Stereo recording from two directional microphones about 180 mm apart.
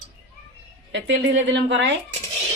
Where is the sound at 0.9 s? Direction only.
90° right.